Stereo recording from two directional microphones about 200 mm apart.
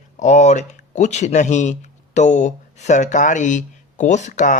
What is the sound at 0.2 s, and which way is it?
Speech, 35° left (ahead or behind).